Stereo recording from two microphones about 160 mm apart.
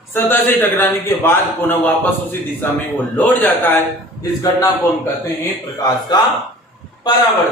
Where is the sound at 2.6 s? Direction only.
10° left (ahead or behind).